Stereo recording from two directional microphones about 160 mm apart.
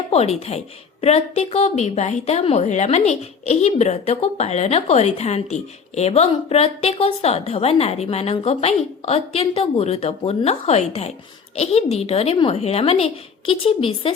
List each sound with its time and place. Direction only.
0.1 s a woman's voice: 40° left (ahead or behind)